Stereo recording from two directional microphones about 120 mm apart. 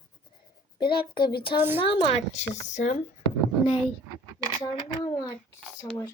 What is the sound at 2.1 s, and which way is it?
Speech, 70° left (ahead or behind).